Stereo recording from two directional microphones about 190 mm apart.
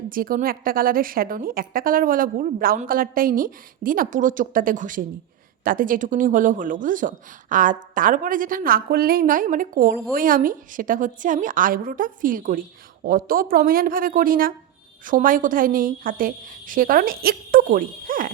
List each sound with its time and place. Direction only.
0.1 s a woman's voice: 50° right (ahead or behind)